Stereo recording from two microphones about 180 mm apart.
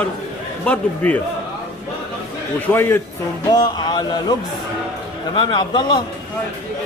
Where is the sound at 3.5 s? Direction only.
25° left (ahead or behind).